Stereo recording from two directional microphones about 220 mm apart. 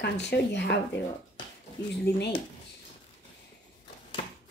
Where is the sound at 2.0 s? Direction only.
50° left (ahead or behind).